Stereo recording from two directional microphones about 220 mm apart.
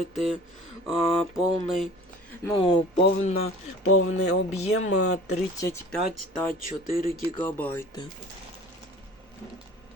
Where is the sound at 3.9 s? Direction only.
80° left.